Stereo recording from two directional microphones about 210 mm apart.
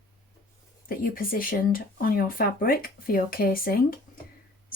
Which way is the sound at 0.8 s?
45° left (ahead or behind).